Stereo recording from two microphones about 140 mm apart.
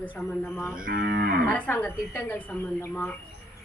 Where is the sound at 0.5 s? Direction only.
20° left (ahead or behind).